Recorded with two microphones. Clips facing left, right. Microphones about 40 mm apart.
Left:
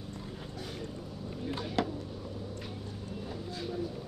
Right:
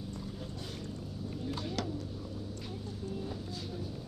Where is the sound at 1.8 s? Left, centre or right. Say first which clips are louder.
Left 8 dB; left.